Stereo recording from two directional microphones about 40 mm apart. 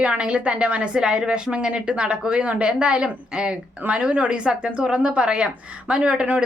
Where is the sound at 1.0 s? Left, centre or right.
Right.